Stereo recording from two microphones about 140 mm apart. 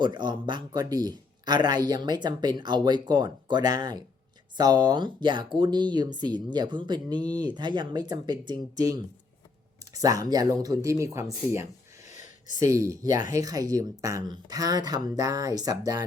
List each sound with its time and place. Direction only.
0.0 s a man's voice: 30° right (ahead or behind)
12.0 s a sound: 60° left (ahead or behind)
12.5 s a man's voice: 20° right (ahead or behind)